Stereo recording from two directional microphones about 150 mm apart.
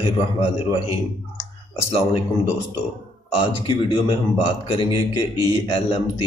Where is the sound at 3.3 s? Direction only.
30° left (ahead or behind).